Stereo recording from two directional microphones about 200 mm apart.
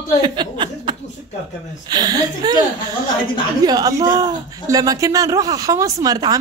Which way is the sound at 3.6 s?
20° right (ahead or behind).